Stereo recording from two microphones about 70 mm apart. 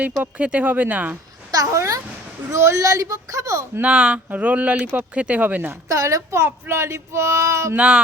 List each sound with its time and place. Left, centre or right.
0.0 s speech: right
1.5 s a child's voice: right
2.5 s speech: right
2.8 s speech: right
3.8 s speech: centre
5.9 s speech: right
7.8 s speech: centre